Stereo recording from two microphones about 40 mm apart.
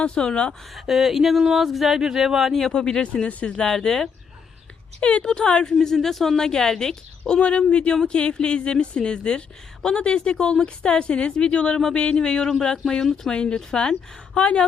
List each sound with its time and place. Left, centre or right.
0.0 s speech: left
0.7 s speech: centre
2.5 s speech: centre
2.7 s speech: centre
4.9 s speech: left
5.2 s speech: left
5.8 s speech: centre
7.7 s speech: left